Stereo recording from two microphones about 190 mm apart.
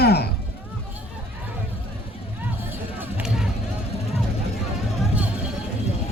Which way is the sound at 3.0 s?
5° right (ahead or behind).